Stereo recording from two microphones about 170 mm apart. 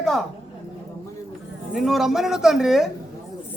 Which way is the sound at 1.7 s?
Centre (ahead or behind).